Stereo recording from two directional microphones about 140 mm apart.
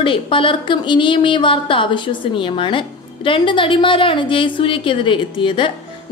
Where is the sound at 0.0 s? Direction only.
35° left (ahead or behind).